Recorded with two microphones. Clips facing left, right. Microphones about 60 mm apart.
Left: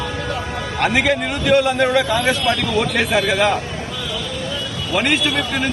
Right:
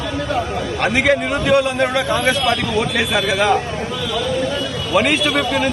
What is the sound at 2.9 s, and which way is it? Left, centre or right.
Speech, centre.